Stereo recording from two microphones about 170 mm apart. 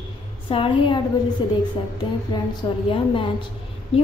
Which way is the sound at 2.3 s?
25° left (ahead or behind).